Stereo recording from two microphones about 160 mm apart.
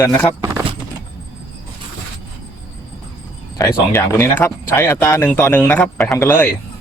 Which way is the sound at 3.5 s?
20° left (ahead or behind).